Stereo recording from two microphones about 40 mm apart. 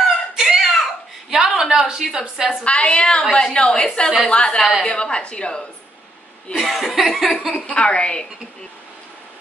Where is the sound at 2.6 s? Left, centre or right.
Left.